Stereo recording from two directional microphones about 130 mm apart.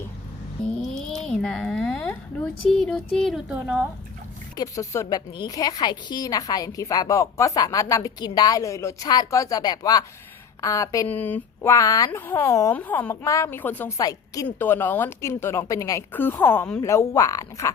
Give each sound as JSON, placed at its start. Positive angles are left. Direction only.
{"t": 0.8, "sound": "a sound", "side_deg": 0}
{"t": 2.6, "sound": "speech", "side_deg": 5}
{"t": 4.5, "sound": "a woman's voice", "side_deg": 25}
{"t": 11.1, "sound": "a woman's voice", "side_deg": 15}
{"t": 12.7, "sound": "speech", "side_deg": 15}
{"t": 13.2, "sound": "a woman's voice", "side_deg": 25}
{"t": 14.4, "sound": "a woman's voice", "side_deg": 15}
{"t": 16.1, "sound": "speech", "side_deg": 15}
{"t": 16.8, "sound": "a woman's voice", "side_deg": 25}